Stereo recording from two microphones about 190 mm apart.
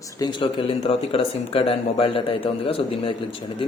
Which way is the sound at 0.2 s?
25° left (ahead or behind).